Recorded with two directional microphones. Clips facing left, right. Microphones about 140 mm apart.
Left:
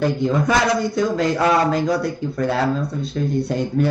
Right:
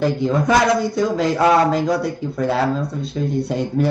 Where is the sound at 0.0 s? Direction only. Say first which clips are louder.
Right 1 dB; centre (ahead or behind).